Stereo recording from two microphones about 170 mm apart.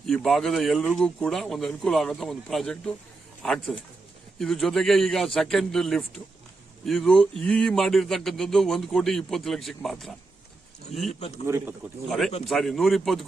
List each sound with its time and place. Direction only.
0.0 s speech: centre (ahead or behind)
12.0 s speech: centre (ahead or behind)